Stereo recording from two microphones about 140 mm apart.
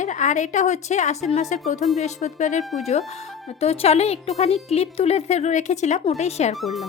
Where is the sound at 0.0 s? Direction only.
60° left (ahead or behind).